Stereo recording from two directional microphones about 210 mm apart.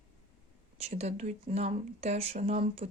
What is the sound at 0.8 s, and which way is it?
Speech, 30° right (ahead or behind).